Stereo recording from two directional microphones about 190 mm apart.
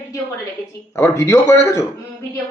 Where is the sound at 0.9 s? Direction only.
15° left (ahead or behind).